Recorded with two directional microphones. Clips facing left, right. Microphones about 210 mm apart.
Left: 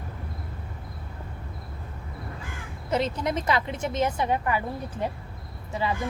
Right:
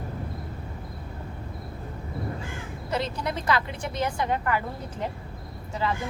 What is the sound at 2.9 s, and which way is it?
A woman's voice, 20° left (ahead or behind).